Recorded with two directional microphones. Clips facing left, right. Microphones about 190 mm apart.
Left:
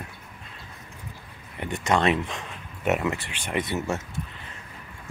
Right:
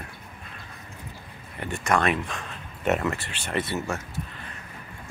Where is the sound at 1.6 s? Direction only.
20° left (ahead or behind).